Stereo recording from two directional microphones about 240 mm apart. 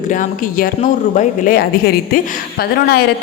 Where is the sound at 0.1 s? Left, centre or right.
Left.